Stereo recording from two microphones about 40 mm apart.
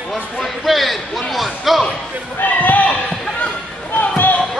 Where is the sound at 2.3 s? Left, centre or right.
Left.